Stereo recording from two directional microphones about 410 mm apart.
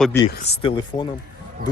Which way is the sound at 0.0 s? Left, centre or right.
Centre.